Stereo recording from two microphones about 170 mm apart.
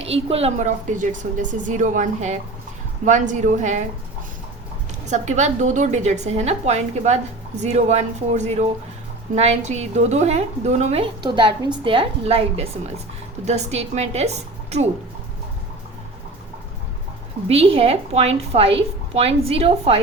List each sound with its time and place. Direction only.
0.0 s a woman's voice: 35° right (ahead or behind)
5.0 s a woman's voice: 45° right (ahead or behind)
17.5 s a woman's voice: 35° right (ahead or behind)